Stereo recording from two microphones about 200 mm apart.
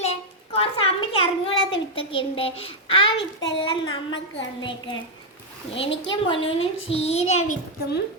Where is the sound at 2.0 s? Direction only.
25° left (ahead or behind).